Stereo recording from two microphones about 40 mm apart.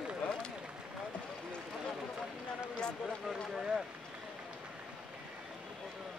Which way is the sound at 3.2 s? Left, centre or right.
Centre.